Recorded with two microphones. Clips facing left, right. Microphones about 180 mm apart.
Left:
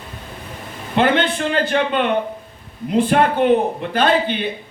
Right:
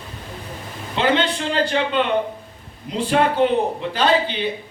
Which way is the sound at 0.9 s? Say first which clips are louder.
Left 3 dB; 55° left (ahead or behind).